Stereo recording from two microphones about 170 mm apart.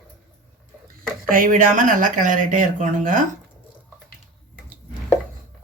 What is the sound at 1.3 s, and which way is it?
Speech, 55° right (ahead or behind).